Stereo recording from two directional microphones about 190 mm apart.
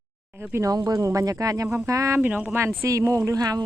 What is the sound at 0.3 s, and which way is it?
Speech, 10° right (ahead or behind).